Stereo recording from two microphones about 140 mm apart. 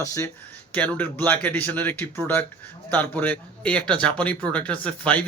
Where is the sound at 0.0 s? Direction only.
20° left (ahead or behind).